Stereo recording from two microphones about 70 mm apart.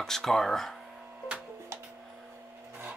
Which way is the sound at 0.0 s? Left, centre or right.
Centre.